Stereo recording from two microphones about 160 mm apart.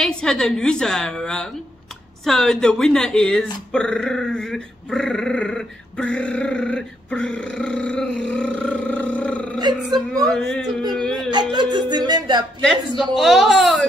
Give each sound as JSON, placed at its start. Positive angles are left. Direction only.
{"t": 0.0, "sound": "a woman's voice", "side_deg": 5}
{"t": 3.7, "sound": "dog", "side_deg": 5}
{"t": 9.6, "sound": "music", "side_deg": -25}
{"t": 10.2, "sound": "a woman's voice", "side_deg": 5}
{"t": 11.1, "sound": "music", "side_deg": -25}
{"t": 13.1, "sound": "a woman's voice", "side_deg": 0}